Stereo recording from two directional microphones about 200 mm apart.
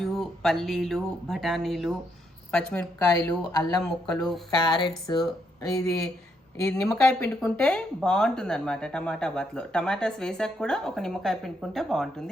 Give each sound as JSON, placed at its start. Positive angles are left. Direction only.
{"t": 0.0, "sound": "speech", "side_deg": 0}
{"t": 4.5, "sound": "speech", "side_deg": 20}